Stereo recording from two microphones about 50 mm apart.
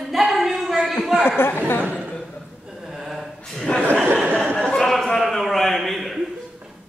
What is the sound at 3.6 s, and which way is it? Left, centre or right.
Chuckle, centre.